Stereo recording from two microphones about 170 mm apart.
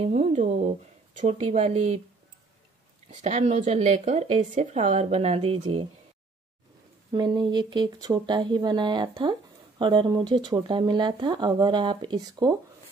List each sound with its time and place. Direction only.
0.0 s a woman's voice: 35° right (ahead or behind)
3.1 s a woman's voice: 40° right (ahead or behind)
7.1 s speech: 25° right (ahead or behind)